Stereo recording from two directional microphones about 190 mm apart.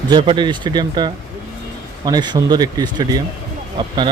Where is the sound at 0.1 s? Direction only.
25° right (ahead or behind).